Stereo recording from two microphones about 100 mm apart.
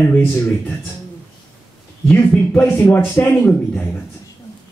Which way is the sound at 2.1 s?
20° left (ahead or behind).